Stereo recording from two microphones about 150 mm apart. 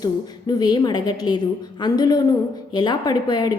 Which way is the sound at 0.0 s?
25° left (ahead or behind).